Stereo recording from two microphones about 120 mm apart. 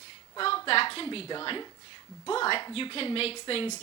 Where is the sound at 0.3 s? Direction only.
45° left (ahead or behind).